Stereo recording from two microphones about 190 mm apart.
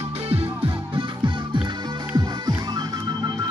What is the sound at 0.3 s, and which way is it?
Music, 30° right (ahead or behind).